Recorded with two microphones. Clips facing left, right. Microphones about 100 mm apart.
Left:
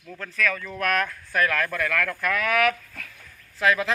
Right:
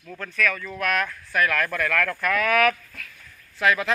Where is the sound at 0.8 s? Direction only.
40° left (ahead or behind).